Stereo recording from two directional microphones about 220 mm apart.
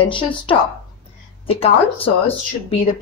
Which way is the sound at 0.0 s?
25° left (ahead or behind).